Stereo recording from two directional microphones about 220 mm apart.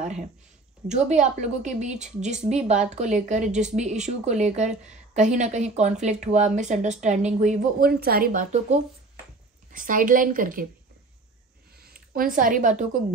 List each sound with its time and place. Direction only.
0.8 s speech: 30° right (ahead or behind)
11.8 s speech: 40° right (ahead or behind)